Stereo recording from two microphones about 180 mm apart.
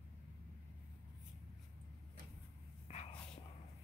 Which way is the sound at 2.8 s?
40° left (ahead or behind).